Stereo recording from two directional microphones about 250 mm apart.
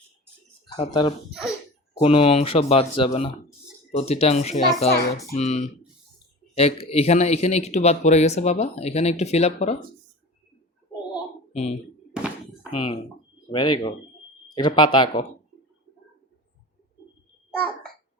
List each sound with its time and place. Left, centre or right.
0.8 s speech: left
1.3 s speech: centre
2.0 s speech: left
11.5 s speech: left
12.1 s a sound: centre
12.7 s speech: left